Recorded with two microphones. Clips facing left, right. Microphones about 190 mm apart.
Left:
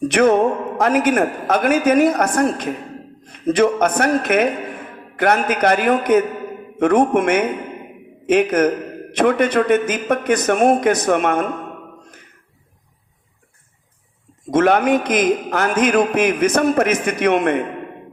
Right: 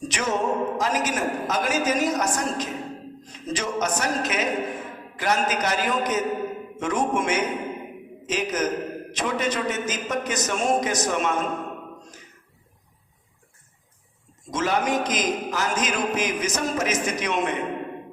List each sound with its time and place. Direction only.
0.0 s a man's voice: 60° left (ahead or behind)
14.5 s a man's voice: 60° left (ahead or behind)